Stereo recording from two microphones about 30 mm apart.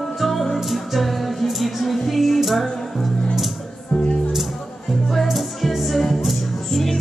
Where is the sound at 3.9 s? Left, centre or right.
Left.